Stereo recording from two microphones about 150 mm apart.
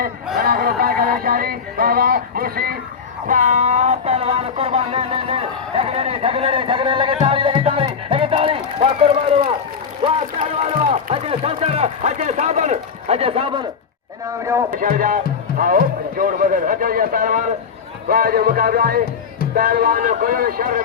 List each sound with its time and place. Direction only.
0.3 s a sound: 75° right (ahead or behind)
3.2 s a sound: 60° right (ahead or behind); by 7.9 s 35° right (ahead or behind)
8.1 s run: 40° right (ahead or behind)
10.0 s speech: 40° right (ahead or behind)
14.7 s speech: 65° right (ahead or behind)
18.1 s music: 85° right
19.5 s speech: 75° right (ahead or behind)